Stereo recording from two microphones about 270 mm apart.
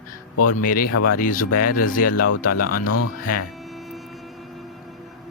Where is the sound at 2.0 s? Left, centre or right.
Left.